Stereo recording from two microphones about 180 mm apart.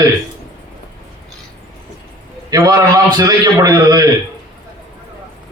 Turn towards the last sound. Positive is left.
turn(degrees=-20)  # may be behind; listen again after turning